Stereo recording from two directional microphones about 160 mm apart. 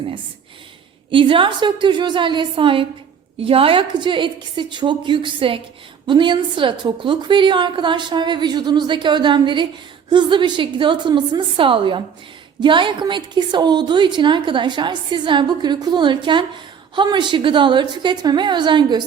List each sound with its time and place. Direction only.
1.1 s a woman's voice: 30° right (ahead or behind)